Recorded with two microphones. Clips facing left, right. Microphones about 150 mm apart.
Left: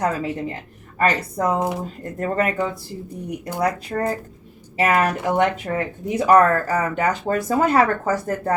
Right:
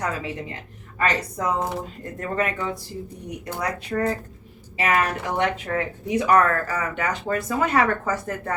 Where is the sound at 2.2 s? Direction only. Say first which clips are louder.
Left 4 dB; 35° left (ahead or behind).